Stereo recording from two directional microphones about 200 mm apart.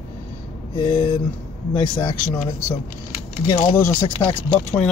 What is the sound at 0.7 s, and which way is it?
Speech, 20° left (ahead or behind).